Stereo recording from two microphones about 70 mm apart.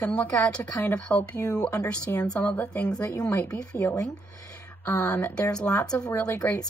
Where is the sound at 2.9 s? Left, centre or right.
Left.